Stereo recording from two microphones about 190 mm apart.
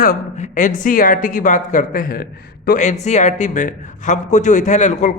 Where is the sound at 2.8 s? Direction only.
35° left (ahead or behind).